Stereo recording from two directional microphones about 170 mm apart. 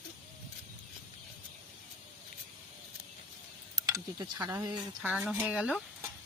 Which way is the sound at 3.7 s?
20° right (ahead or behind).